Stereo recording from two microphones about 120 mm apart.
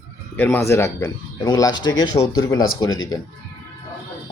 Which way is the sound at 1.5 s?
35° left (ahead or behind).